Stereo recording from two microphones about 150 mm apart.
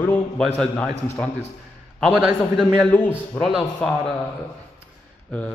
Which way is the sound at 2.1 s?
10° right (ahead or behind).